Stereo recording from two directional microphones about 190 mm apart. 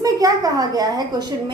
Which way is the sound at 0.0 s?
20° right (ahead or behind).